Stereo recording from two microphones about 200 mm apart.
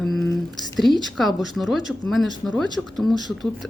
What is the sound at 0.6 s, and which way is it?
Speech, centre (ahead or behind).